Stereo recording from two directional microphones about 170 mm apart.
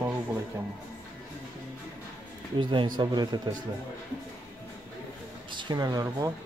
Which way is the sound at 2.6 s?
25° right (ahead or behind).